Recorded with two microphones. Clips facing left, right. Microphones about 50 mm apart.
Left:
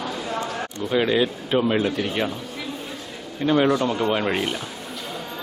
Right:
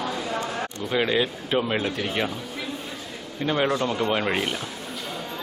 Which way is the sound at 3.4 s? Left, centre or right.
Centre.